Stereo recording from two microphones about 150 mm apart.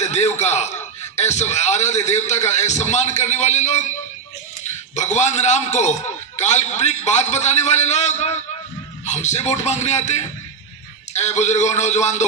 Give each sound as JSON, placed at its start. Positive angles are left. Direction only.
{"t": 0.0, "sound": "a man's voice", "side_deg": 50}
{"t": 4.9, "sound": "a man's voice", "side_deg": 50}